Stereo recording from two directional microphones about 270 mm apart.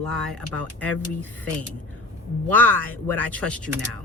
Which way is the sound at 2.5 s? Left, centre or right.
Centre.